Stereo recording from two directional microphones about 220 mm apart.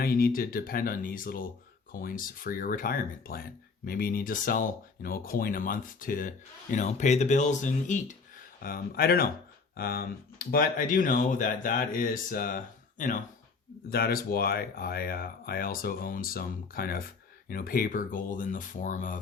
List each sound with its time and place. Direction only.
0.0 s speech: 40° left (ahead or behind)